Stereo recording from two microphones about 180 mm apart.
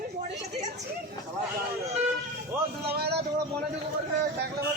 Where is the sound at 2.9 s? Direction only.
60° right (ahead or behind).